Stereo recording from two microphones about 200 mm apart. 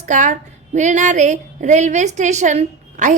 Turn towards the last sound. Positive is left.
turn(degrees=-40)  # may be behind; listen again after turning